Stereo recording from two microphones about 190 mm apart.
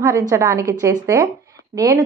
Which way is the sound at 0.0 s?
15° right (ahead or behind).